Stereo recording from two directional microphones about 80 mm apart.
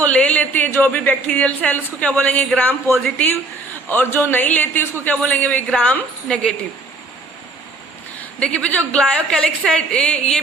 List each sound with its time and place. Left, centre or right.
0.0 s a woman's voice: centre
8.2 s a woman's voice: centre